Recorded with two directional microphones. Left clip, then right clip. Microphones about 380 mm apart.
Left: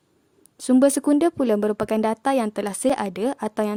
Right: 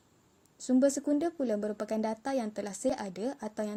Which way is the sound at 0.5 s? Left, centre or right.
Left.